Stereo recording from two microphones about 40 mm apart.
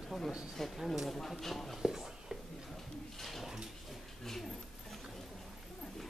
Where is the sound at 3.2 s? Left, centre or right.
Centre.